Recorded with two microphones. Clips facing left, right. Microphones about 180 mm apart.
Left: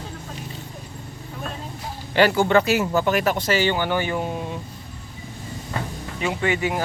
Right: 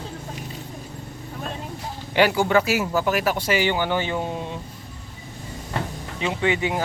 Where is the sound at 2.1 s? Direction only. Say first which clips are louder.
Left 1 dB; 10° right (ahead or behind).